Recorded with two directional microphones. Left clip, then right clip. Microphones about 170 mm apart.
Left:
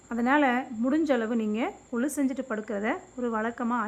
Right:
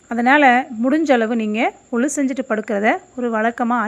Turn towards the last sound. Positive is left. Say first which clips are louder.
# right 11 dB
turn(degrees=-25)  # may be behind; listen again after turning